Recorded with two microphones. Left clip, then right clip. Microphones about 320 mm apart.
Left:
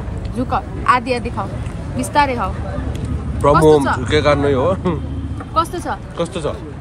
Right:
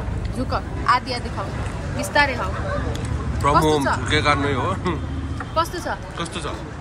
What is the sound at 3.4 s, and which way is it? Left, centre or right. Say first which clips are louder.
Speech: left 6 dB; centre.